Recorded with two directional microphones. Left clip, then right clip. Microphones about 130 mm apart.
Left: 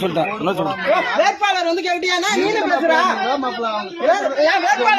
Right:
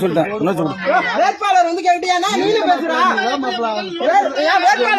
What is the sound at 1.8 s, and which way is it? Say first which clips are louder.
Speech: right 4 dB; 35° right (ahead or behind).